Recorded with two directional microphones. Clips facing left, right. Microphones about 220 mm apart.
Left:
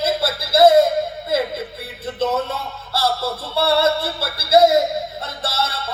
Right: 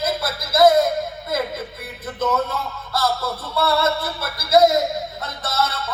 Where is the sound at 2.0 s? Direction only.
30° left (ahead or behind).